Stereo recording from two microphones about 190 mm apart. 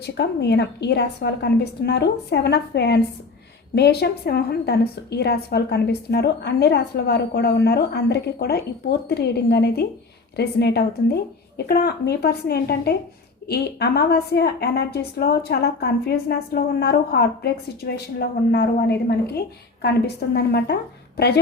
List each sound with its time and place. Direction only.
0.0 s a woman's voice: 60° left (ahead or behind)